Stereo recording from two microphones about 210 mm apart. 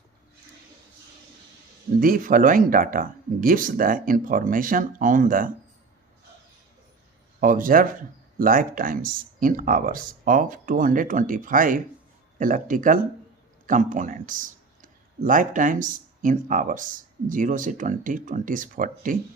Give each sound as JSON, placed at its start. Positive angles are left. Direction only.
{"t": 2.0, "sound": "speech", "side_deg": -40}
{"t": 7.4, "sound": "speech", "side_deg": -40}